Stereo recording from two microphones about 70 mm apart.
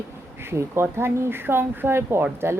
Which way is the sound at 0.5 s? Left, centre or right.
Right.